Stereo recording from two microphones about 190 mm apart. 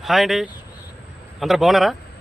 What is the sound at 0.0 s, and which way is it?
A man's voice, centre (ahead or behind).